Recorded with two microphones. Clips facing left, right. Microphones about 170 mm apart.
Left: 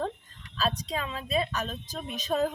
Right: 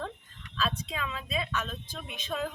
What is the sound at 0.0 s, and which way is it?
A woman's voice, 40° left (ahead or behind).